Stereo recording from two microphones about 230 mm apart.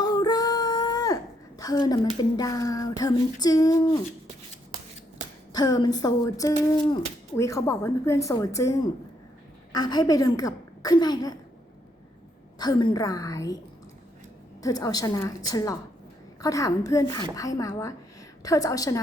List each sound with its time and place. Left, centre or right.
0.0 s female singing: centre
2.3 s speech: centre
5.5 s speech: centre
12.5 s speech: centre
14.6 s speech: centre